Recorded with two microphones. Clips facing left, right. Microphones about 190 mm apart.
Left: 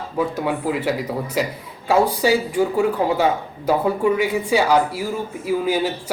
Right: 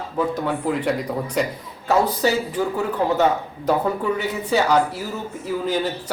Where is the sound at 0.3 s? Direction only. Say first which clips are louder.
Left 1 dB; 10° left (ahead or behind).